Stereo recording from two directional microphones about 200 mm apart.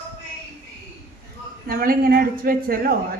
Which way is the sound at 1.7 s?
45° right (ahead or behind).